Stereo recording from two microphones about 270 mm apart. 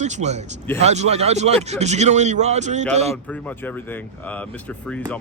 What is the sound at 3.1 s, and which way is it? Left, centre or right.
Speech, centre.